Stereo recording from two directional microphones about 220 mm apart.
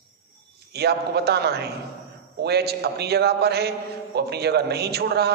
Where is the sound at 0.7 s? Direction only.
45° right (ahead or behind).